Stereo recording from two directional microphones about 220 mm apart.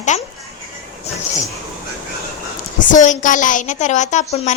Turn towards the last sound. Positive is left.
turn(degrees=35)  # may be behind; listen again after turning